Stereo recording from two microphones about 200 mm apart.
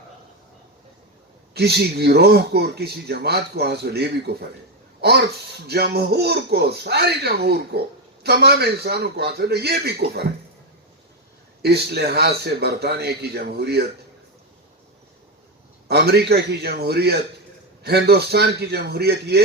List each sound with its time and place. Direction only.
1.5 s speech: 50° right (ahead or behind)
4.9 s a sound: 55° right (ahead or behind)
5.6 s speech: 55° right (ahead or behind)
11.6 s speech: 55° right (ahead or behind)
15.9 s speech: 50° right (ahead or behind)